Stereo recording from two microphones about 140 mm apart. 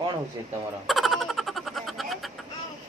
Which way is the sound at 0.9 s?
Centre (ahead or behind).